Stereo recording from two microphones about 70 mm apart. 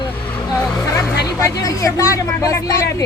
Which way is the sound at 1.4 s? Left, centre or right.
Left.